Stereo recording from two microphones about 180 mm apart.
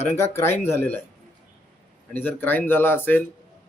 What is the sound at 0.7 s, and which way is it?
Speech, 10° left (ahead or behind).